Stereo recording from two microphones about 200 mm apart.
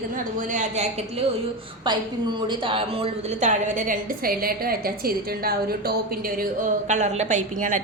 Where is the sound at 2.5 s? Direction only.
25° right (ahead or behind); by 6.0 s 50° right (ahead or behind).